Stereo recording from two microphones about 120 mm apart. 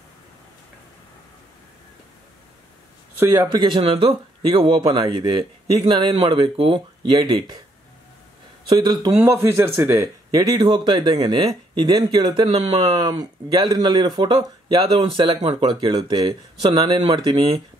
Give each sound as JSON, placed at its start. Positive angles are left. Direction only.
{"t": 3.2, "sound": "speech", "side_deg": -25}
{"t": 3.6, "sound": "speech", "side_deg": -45}
{"t": 8.6, "sound": "speech", "side_deg": -35}
{"t": 9.2, "sound": "speech", "side_deg": -20}
{"t": 10.3, "sound": "speech", "side_deg": -35}